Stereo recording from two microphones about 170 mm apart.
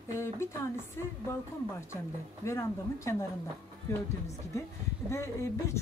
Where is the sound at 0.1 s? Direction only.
15° left (ahead or behind).